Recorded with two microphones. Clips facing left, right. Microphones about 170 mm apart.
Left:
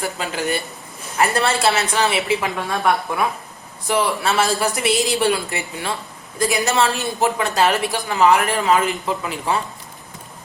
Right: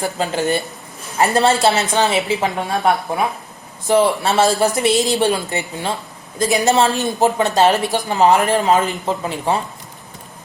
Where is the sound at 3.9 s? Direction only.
30° right (ahead or behind).